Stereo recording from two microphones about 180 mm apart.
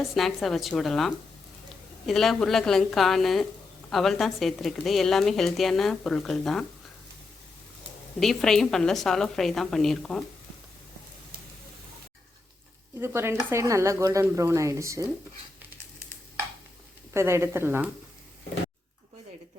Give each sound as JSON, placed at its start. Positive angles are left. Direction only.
{"t": 0.1, "sound": "a woman's voice", "side_deg": 0}
{"t": 8.2, "sound": "a woman's voice", "side_deg": 0}
{"t": 13.0, "sound": "speech", "side_deg": -15}
{"t": 17.2, "sound": "speech", "side_deg": -15}